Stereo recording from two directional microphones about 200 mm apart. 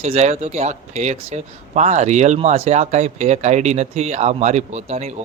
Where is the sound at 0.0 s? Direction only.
35° right (ahead or behind).